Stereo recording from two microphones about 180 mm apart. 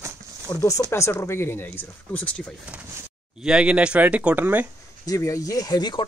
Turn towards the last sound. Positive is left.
turn(degrees=20)  # may be behind; listen again after turning